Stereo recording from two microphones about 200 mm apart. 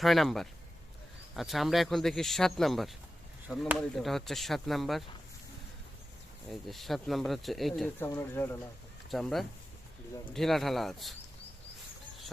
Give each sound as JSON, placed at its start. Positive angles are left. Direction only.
{"t": 0.0, "sound": "speech", "side_deg": 0}
{"t": 6.5, "sound": "speech", "side_deg": 0}
{"t": 7.9, "sound": "speech", "side_deg": 10}